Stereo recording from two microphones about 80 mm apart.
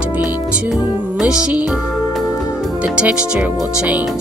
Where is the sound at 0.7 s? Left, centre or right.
Centre.